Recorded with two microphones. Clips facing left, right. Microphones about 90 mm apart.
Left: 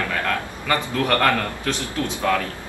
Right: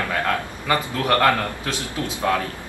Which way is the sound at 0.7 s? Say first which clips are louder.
Right 1 dB; 20° right (ahead or behind).